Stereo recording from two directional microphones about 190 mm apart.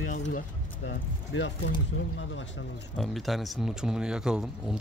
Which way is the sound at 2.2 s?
80° left.